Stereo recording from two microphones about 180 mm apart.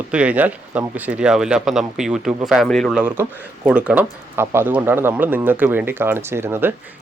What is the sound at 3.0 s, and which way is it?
Speech, 10° right (ahead or behind).